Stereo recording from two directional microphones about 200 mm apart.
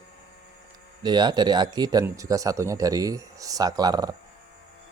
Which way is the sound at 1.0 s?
20° right (ahead or behind).